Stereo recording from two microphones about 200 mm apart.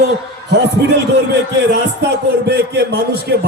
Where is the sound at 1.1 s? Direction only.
55° right (ahead or behind).